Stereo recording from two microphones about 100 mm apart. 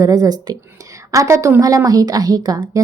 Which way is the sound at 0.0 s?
40° right (ahead or behind).